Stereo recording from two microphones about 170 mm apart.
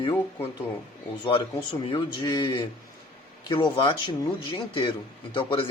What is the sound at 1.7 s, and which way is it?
Speech, 30° left (ahead or behind).